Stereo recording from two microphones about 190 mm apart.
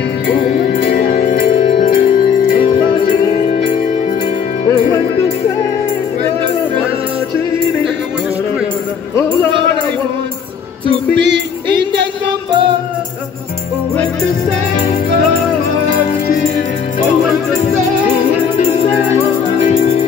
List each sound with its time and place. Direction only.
0.9 s music: 45° left (ahead or behind)